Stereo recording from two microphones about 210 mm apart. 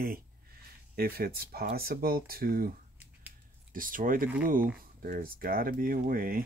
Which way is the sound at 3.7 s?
40° right (ahead or behind).